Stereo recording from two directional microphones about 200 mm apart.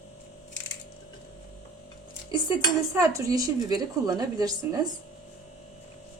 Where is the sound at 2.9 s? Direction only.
15° right (ahead or behind).